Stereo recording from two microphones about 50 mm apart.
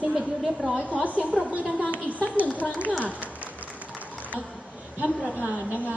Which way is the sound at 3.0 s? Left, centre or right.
Right.